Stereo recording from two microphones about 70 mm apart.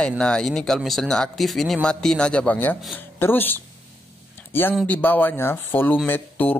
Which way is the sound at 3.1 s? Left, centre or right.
Left.